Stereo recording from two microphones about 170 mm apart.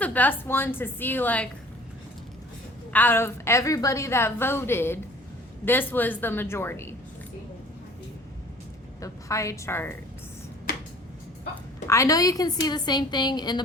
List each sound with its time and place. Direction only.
0.0 s a woman's voice: 10° left (ahead or behind)
2.9 s a woman's voice: 10° left (ahead or behind)
9.0 s a woman's voice: 20° left (ahead or behind)
11.9 s a woman's voice: 20° left (ahead or behind)